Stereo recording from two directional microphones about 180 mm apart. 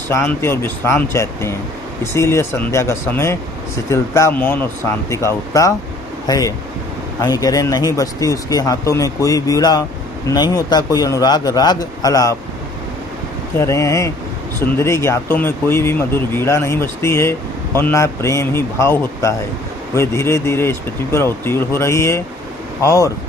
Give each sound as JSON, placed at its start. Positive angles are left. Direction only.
{"t": 0.1, "sound": "speech", "side_deg": 15}
{"t": 13.6, "sound": "speech", "side_deg": 15}